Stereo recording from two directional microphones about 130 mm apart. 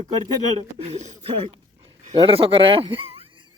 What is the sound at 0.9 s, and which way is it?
Speech, 65° right (ahead or behind).